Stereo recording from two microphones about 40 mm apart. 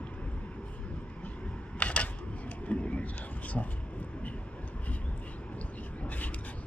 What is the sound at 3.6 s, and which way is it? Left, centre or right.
Speech, centre.